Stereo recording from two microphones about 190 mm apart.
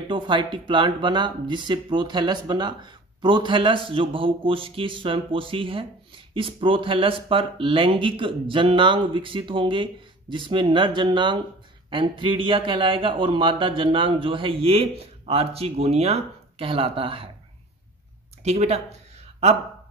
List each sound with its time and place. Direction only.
0.1 s speech: 25° right (ahead or behind)
18.4 s speech: 35° right (ahead or behind)